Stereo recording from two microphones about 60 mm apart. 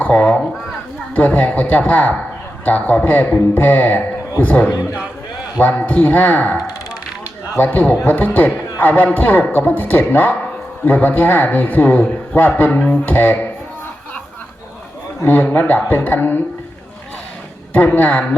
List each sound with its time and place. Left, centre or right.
0.0 s a man's voice: left
7.6 s a man's voice: left
15.3 s a man's voice: left
17.7 s a man's voice: left